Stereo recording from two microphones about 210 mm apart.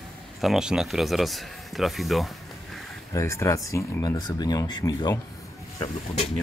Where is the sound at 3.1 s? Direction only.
15° left (ahead or behind).